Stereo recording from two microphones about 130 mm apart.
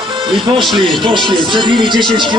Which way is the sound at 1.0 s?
40° right (ahead or behind).